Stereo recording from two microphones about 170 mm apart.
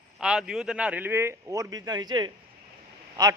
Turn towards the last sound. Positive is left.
turn(degrees=-20)  # may be behind; listen again after turning